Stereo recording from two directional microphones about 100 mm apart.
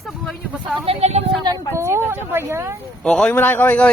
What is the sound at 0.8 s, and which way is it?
Vehicle, 85° right.